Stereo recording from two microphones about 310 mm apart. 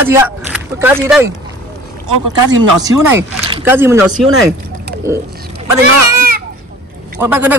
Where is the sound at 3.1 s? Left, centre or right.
Centre.